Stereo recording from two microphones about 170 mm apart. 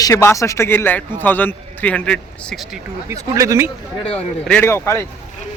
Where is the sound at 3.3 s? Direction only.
20° right (ahead or behind).